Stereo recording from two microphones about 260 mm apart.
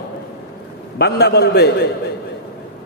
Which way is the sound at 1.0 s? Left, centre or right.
Left.